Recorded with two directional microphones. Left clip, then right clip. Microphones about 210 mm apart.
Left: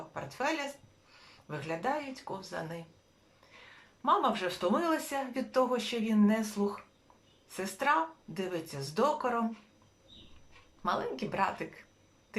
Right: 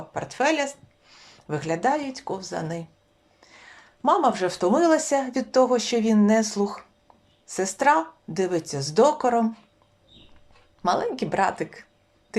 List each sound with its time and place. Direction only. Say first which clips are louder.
0.1 s speech: right 11 dB; 40° right (ahead or behind)
4.0 s speech: right 8 dB; 35° right (ahead or behind)
10.8 s speech: right 9 dB; 35° right (ahead or behind)